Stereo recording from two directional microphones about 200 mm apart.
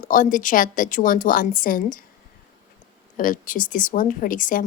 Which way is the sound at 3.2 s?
40° left (ahead or behind).